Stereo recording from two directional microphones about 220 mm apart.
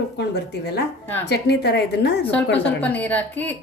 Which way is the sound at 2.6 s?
5° left (ahead or behind).